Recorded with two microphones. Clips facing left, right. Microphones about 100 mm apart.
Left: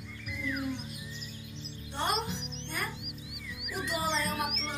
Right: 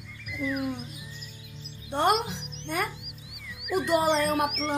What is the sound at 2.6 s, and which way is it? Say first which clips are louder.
Music: right 9 dB; 90° right.